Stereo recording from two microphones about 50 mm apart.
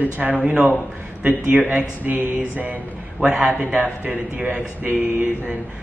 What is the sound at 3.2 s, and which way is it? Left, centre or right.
Speech, centre.